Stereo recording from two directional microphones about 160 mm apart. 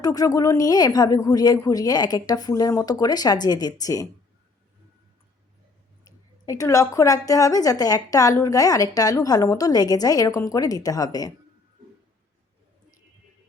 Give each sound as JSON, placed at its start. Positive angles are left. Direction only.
{"t": 0.0, "sound": "a woman's voice", "side_deg": 20}
{"t": 6.1, "sound": "a woman's voice", "side_deg": 20}